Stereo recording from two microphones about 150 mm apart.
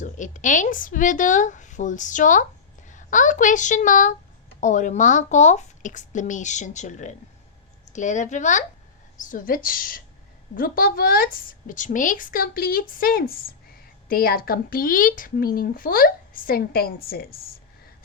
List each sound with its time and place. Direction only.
0.0 s a woman's voice: 55° left (ahead or behind); by 17.4 s 85° left